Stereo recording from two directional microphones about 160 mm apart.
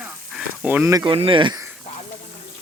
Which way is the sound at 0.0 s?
10° right (ahead or behind).